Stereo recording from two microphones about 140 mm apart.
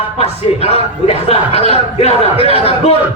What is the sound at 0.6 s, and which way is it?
Speech, 45° left (ahead or behind).